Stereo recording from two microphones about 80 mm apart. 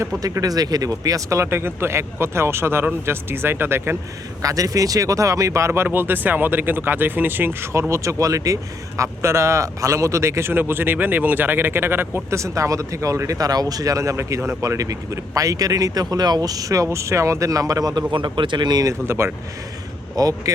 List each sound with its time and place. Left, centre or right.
0.2 s a man's voice: right
4.4 s a man's voice: right
18.1 s speech: right
18.9 s a man's voice: right
20.1 s speech: right